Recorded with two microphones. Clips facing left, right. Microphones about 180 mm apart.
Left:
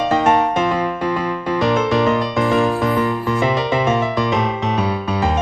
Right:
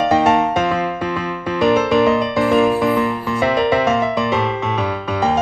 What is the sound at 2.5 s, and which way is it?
Music, 15° right (ahead or behind).